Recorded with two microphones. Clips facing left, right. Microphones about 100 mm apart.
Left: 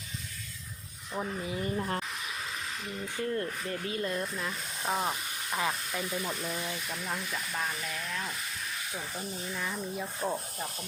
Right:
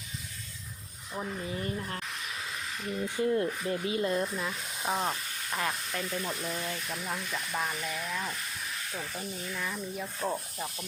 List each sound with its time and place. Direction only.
1.1 s speech: 5° left (ahead or behind)
3.2 s speech: 15° right (ahead or behind)
4.4 s speech: centre (ahead or behind)
8.9 s speech: 10° left (ahead or behind)
10.2 s speech: centre (ahead or behind)